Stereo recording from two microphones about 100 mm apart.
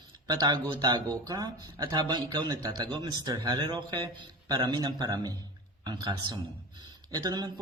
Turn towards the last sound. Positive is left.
turn(degrees=-45)  # may be behind; listen again after turning